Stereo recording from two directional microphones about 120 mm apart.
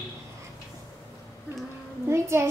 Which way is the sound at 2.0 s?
20° right (ahead or behind).